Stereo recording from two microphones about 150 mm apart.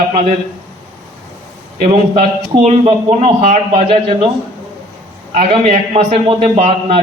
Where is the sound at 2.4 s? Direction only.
45° right (ahead or behind).